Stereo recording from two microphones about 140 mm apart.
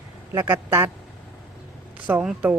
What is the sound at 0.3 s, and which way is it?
Speech, 15° right (ahead or behind).